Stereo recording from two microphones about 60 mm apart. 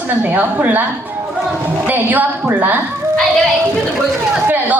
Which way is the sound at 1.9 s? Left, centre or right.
Right.